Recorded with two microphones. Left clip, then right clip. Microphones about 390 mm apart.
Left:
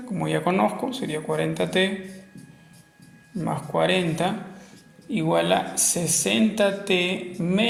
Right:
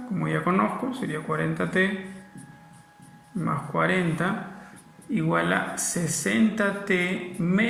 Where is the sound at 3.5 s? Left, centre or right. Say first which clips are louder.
Left 2 dB; left.